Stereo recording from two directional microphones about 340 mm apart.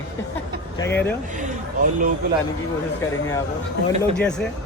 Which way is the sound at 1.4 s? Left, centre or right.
Right.